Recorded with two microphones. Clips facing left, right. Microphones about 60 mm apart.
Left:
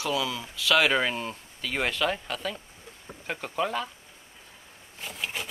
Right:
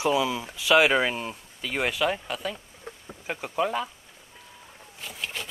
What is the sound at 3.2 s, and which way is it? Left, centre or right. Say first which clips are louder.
Speech: right 2 dB; centre.